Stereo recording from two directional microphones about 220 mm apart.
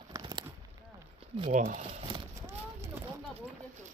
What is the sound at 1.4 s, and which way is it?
Speech, 35° right (ahead or behind).